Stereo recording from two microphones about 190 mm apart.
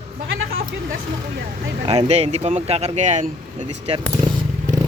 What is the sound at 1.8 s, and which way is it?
Speech, 35° right (ahead or behind).